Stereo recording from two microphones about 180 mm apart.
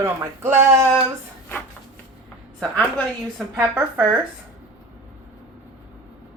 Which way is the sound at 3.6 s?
10° right (ahead or behind).